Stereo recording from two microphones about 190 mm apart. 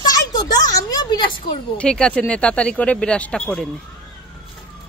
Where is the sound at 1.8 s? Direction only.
5° left (ahead or behind).